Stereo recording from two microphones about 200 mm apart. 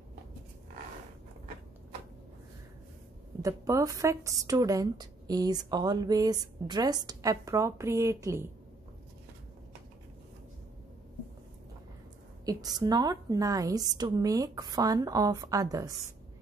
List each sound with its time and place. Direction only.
3.4 s a woman's voice: 15° right (ahead or behind)
12.4 s a woman's voice: 20° right (ahead or behind)